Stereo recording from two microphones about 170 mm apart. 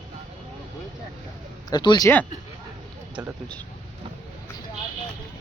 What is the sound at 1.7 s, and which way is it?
Speech, 25° left (ahead or behind).